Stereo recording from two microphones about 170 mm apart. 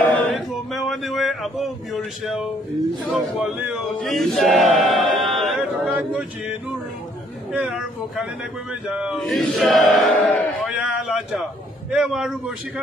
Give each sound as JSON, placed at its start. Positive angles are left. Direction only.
{"t": 0.0, "sound": "music", "side_deg": 5}
{"t": 3.1, "sound": "chant", "side_deg": -5}
{"t": 7.5, "sound": "chant", "side_deg": -5}
{"t": 10.7, "sound": "a sound", "side_deg": -5}
{"t": 11.9, "sound": "chant", "side_deg": -5}